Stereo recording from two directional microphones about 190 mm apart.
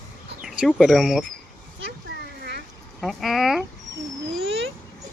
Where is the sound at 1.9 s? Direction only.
55° right (ahead or behind).